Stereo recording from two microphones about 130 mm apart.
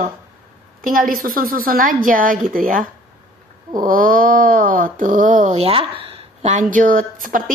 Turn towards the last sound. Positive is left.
turn(degrees=-90)